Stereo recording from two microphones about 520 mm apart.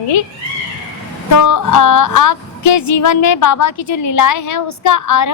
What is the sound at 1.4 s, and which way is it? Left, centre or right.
Music, left.